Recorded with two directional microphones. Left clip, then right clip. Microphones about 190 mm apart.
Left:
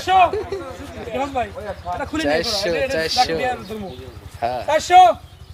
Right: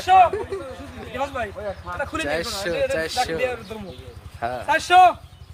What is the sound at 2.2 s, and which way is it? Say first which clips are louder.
A man's voice: left 8 dB; 15° right (ahead or behind).